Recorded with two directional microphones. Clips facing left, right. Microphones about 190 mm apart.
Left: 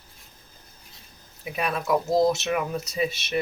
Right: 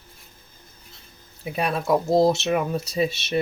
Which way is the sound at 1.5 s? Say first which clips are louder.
Right 3 dB; 30° right (ahead or behind).